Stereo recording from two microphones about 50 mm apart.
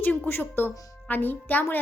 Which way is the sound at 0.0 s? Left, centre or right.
Left.